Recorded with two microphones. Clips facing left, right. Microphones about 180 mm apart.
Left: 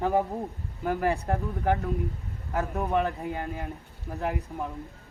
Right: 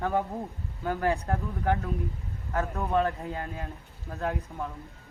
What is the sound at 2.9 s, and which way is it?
A man's voice, 15° left (ahead or behind).